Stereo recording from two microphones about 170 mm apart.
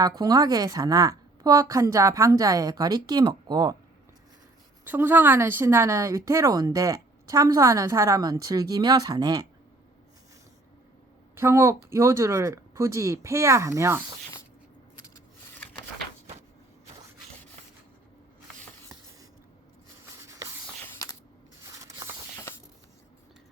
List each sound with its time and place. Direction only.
0.0 s a woman's voice: 20° right (ahead or behind)
4.9 s a woman's voice: 10° right (ahead or behind)
11.3 s speech: 15° right (ahead or behind)
20.8 s coin: 20° left (ahead or behind)
21.6 s a sound: 20° right (ahead or behind)